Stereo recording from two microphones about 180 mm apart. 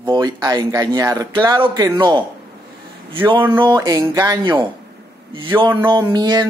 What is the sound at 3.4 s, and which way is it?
Speech, 25° right (ahead or behind).